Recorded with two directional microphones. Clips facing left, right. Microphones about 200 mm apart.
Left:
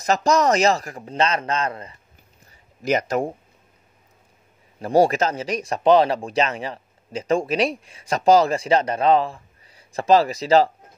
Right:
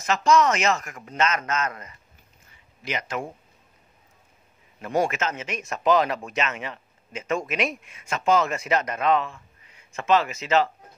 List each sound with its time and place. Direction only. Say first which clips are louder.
0.0 s speech: left 1 dB; 40° left (ahead or behind)
2.4 s a sound: left 10 dB; 40° left (ahead or behind)
4.7 s speech: left 7 dB; 35° left (ahead or behind)